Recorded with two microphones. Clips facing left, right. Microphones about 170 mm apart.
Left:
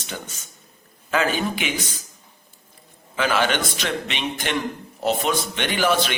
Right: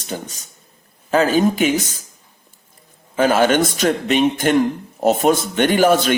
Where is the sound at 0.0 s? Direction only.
40° right (ahead or behind).